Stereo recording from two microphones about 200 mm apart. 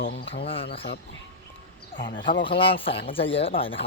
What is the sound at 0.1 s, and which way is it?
Speech, 60° left (ahead or behind).